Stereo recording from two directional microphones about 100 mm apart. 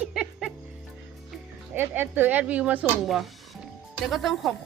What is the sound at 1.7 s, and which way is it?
Speech, 20° right (ahead or behind).